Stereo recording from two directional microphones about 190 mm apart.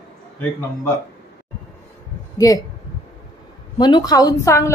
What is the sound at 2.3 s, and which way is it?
Speech, 20° left (ahead or behind).